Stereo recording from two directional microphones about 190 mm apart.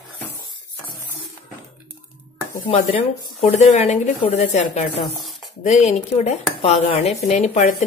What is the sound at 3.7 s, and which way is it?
A woman's voice, 40° left (ahead or behind).